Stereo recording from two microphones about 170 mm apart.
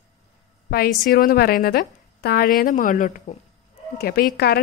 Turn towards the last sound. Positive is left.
turn(degrees=65)  # may be behind; listen again after turning